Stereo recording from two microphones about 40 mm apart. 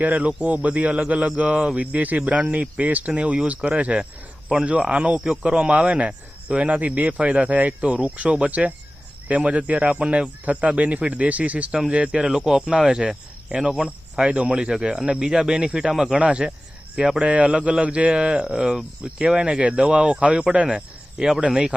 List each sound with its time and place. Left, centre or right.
0.0 s speech: right; by 16.1 s centre
16.1 s speech: right
16.9 s speech: centre
17.2 s speech: right